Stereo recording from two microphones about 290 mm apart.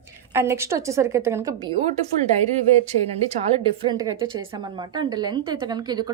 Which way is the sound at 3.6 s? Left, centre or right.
Centre.